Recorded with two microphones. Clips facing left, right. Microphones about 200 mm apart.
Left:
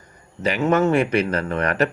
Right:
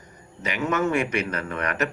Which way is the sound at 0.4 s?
30° left (ahead or behind).